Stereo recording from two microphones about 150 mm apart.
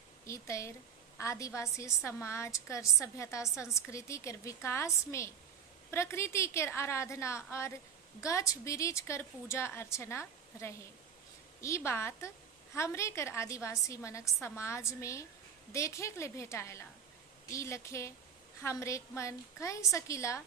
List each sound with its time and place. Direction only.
0.3 s a woman's voice: 20° left (ahead or behind)